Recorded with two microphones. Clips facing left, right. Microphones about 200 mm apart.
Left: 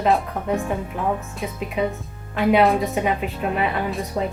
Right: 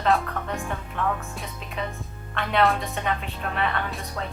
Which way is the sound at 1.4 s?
5° left (ahead or behind).